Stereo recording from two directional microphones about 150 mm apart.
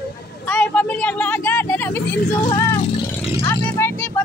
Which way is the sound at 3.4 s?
15° left (ahead or behind).